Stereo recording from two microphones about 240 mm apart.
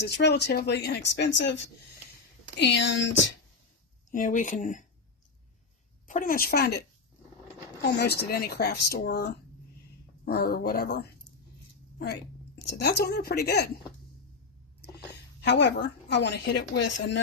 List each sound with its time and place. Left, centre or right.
0.0 s a woman's voice: left
4.1 s speech: left
6.1 s speech: left
12.7 s a woman's voice: left
15.4 s a woman's voice: left